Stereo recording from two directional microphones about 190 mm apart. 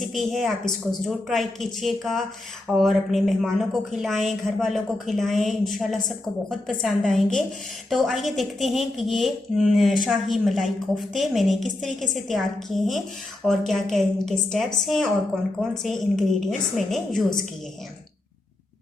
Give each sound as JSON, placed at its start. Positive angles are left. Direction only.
{"t": 0.0, "sound": "a woman's voice", "side_deg": 0}